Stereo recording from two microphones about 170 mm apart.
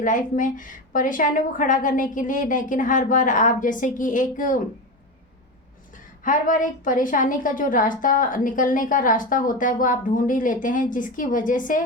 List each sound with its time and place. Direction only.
0.0 s a woman's voice: 50° left (ahead or behind)
5.9 s a woman's voice: 50° left (ahead or behind)